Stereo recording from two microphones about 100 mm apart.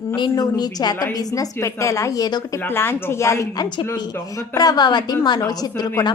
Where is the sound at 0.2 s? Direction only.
45° left (ahead or behind).